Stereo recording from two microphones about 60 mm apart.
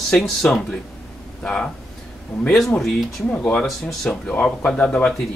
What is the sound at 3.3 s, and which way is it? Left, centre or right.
Speech, left.